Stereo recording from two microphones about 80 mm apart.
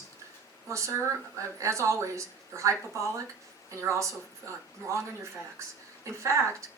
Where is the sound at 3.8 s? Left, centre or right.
Right.